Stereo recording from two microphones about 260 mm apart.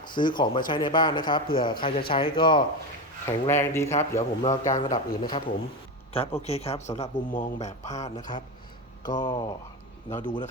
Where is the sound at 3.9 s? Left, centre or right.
Left.